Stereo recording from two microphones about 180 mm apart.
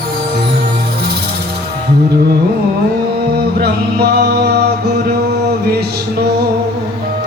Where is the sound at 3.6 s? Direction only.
65° right (ahead or behind).